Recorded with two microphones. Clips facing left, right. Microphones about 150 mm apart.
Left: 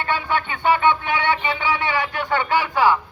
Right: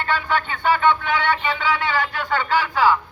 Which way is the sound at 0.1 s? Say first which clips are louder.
Right 1 dB; 20° left (ahead or behind).